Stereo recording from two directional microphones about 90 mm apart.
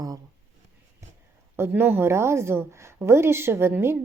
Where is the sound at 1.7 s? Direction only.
25° right (ahead or behind).